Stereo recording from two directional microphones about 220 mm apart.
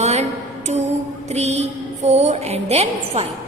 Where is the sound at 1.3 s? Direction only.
30° right (ahead or behind).